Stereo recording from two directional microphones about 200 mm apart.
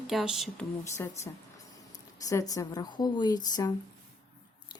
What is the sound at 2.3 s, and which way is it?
A woman's voice, 15° left (ahead or behind).